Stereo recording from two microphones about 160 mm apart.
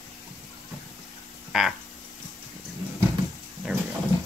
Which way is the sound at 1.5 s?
Centre (ahead or behind).